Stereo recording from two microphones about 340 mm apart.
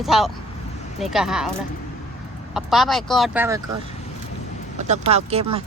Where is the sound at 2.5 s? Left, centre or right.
Centre.